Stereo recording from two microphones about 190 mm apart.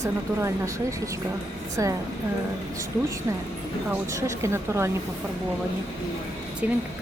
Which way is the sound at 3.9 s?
15° right (ahead or behind).